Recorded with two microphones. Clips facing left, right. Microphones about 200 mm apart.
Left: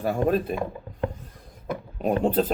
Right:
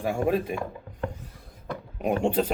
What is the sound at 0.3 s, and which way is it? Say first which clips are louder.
Speech: left 1 dB; 15° right (ahead or behind).